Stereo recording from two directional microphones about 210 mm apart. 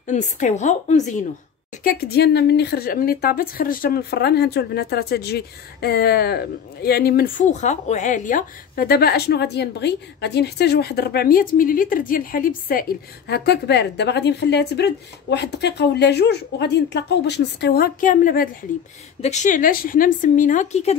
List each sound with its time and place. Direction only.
0.0 s speech: 35° left (ahead or behind)
1.8 s speech: 45° left (ahead or behind)